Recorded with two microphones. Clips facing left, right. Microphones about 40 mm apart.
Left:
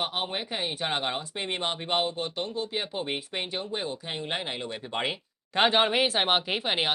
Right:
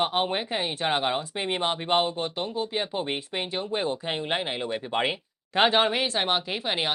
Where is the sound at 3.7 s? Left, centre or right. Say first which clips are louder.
Right 5 dB; right.